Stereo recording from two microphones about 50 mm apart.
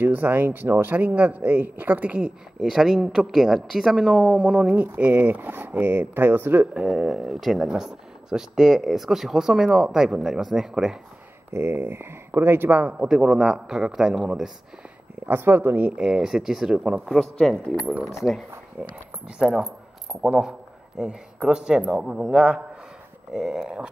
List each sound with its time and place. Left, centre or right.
0.0 s speech: right
2.6 s speech: centre
4.7 s speech: right
6.7 s speech: centre
11.5 s speech: right
12.8 s speech: centre
15.2 s speech: right
15.8 s speech: centre
17.1 s speech: centre
18.0 s speech: centre
19.2 s speech: right